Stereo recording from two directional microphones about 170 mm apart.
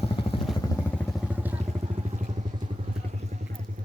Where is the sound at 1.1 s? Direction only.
10° right (ahead or behind).